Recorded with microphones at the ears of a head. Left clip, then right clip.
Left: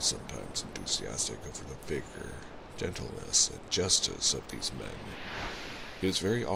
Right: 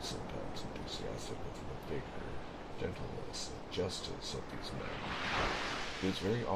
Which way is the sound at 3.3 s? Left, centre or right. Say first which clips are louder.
Left 15 dB; left.